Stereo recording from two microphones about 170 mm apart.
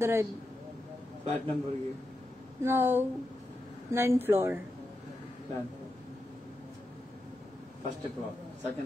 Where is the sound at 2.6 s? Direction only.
15° right (ahead or behind).